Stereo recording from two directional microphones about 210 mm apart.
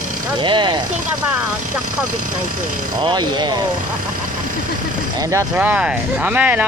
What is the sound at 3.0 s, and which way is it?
Speech, 20° right (ahead or behind).